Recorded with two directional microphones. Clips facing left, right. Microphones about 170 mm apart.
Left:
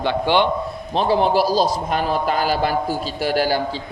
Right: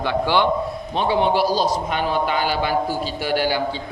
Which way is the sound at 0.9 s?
35° left (ahead or behind).